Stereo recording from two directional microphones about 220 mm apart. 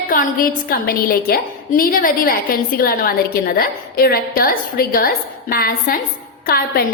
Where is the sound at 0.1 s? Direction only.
40° left (ahead or behind).